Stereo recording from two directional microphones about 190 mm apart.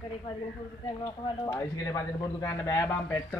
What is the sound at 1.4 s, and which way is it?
Speech, 20° left (ahead or behind).